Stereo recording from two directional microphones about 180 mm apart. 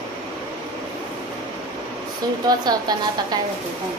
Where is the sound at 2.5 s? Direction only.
20° right (ahead or behind).